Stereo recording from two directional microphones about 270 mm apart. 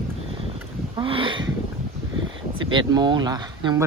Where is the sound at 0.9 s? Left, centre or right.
Centre.